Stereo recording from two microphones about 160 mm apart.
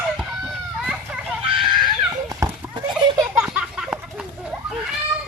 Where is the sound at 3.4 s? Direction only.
5° right (ahead or behind).